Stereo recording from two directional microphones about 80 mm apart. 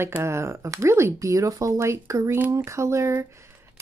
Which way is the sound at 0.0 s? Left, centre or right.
Right.